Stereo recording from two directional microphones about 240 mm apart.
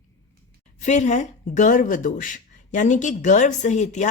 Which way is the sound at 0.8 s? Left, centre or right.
Left.